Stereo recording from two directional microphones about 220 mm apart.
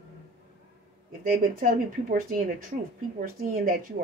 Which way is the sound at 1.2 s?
40° right (ahead or behind).